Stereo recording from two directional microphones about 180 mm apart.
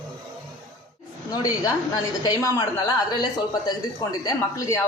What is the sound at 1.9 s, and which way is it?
A woman's voice, 20° left (ahead or behind).